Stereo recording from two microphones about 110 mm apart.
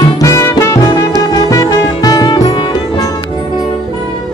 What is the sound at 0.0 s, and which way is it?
Music, 30° left (ahead or behind).